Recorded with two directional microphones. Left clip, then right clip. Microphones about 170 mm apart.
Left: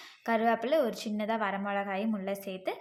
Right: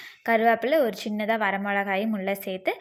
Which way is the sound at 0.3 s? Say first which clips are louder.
Right 7 dB; 20° right (ahead or behind).